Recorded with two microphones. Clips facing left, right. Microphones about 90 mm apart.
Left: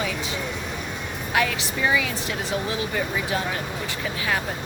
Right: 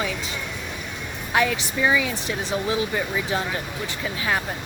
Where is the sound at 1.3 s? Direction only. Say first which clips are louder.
Right 2 dB; 25° right (ahead or behind).